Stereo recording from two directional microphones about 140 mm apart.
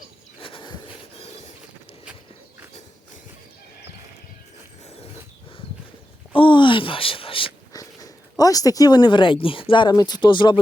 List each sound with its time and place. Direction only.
0.3 s a sound: 40° left (ahead or behind)
6.3 s speech: 35° left (ahead or behind)
7.7 s speech: 25° left (ahead or behind)